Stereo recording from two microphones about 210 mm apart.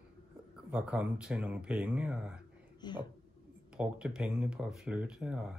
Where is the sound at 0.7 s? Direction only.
5° right (ahead or behind).